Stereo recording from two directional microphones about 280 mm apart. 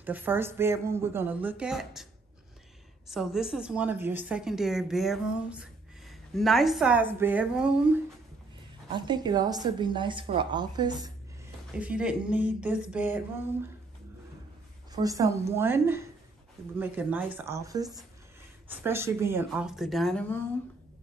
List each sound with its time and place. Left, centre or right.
0.0 s a woman's voice: centre
3.1 s a woman's voice: centre
11.7 s a woman's voice: centre
14.9 s a woman's voice: centre